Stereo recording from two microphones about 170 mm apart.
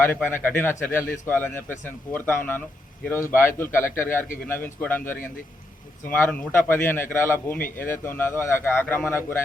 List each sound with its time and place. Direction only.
0.0 s speech: 10° left (ahead or behind)